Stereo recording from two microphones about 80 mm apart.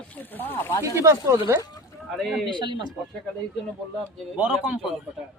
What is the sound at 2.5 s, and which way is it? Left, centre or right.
Speech, right.